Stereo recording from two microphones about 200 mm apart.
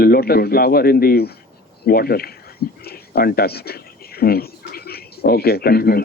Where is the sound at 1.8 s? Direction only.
50° left (ahead or behind).